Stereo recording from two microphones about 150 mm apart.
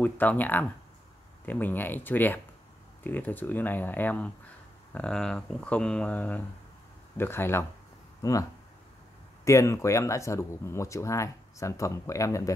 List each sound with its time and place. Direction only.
0.0 s speech: 10° left (ahead or behind)